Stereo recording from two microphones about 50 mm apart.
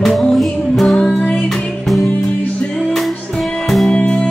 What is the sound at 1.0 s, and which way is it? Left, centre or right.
Music, centre.